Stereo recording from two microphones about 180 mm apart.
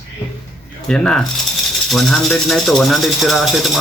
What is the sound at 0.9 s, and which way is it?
Speech, 5° left (ahead or behind).